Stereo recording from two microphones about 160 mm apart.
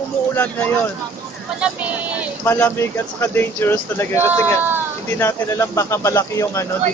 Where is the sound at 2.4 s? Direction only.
15° left (ahead or behind).